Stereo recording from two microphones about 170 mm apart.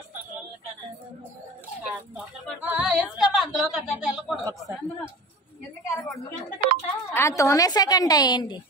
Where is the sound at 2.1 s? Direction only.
10° right (ahead or behind).